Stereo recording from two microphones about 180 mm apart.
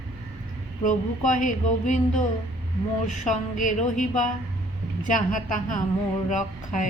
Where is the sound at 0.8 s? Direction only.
45° left (ahead or behind).